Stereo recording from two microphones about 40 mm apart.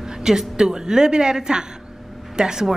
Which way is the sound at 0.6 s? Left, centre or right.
Centre.